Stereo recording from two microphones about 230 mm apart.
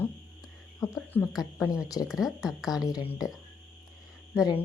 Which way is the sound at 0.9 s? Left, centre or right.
Centre.